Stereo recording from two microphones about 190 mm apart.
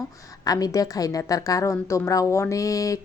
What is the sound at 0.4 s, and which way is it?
A woman's voice, 20° left (ahead or behind).